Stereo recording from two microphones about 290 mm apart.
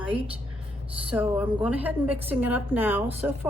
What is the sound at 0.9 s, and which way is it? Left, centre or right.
A woman's voice, centre.